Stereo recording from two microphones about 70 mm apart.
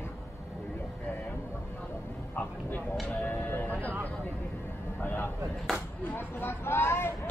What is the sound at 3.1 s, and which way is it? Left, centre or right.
Speech, left.